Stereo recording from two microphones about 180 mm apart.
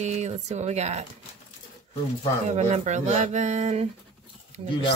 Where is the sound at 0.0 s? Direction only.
40° right (ahead or behind).